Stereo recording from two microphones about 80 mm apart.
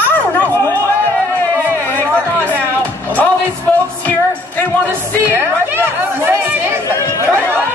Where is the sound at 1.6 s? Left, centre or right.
Left.